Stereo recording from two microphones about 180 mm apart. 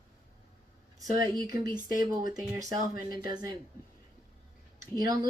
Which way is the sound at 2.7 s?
55° left (ahead or behind).